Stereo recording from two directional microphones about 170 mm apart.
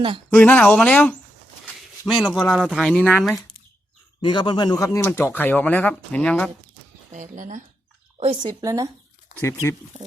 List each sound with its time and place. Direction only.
0.3 s speech: 10° left (ahead or behind)
2.0 s speech: centre (ahead or behind)
4.2 s a man's voice: 30° left (ahead or behind); by 6.5 s 5° left (ahead or behind)
7.1 s speech: 45° right (ahead or behind)
8.2 s speech: 30° right (ahead or behind)
9.4 s speech: 15° left (ahead or behind)